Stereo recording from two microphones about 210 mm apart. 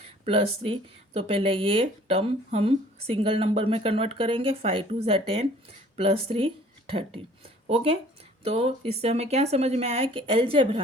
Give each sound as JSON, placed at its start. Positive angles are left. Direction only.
{"t": 0.0, "sound": "speech", "side_deg": -25}